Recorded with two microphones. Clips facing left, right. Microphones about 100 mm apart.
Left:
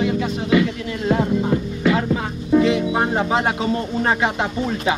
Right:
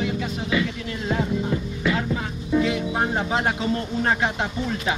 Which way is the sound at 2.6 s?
70° left (ahead or behind).